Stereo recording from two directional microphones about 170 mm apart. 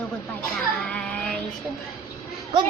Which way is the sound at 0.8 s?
5° left (ahead or behind).